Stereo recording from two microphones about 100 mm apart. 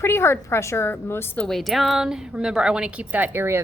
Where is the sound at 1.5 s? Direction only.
Centre (ahead or behind).